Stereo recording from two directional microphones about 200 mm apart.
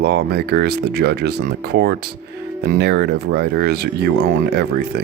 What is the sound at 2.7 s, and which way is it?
Speech, 55° right (ahead or behind).